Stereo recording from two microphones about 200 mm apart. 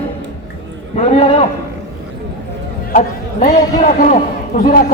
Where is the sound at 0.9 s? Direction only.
30° left (ahead or behind).